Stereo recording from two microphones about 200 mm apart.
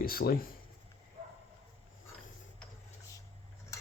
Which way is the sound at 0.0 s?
50° left (ahead or behind).